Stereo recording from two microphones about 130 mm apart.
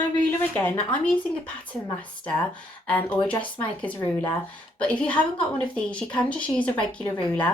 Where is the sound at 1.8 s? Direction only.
40° left (ahead or behind).